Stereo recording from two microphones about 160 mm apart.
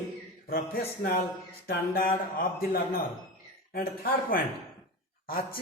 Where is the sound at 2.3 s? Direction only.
65° left (ahead or behind).